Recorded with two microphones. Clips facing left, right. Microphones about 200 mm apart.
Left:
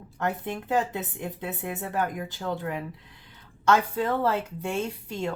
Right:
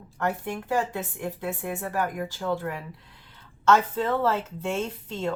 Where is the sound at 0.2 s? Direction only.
20° left (ahead or behind).